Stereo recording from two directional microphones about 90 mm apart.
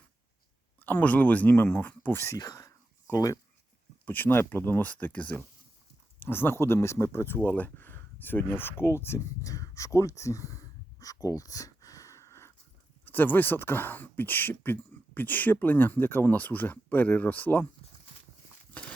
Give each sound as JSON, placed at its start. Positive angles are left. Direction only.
{"t": 0.8, "sound": "speech", "side_deg": 20}
{"t": 2.3, "sound": "a sound", "side_deg": 40}
{"t": 4.0, "sound": "speech", "side_deg": 20}
{"t": 13.1, "sound": "speech", "side_deg": 20}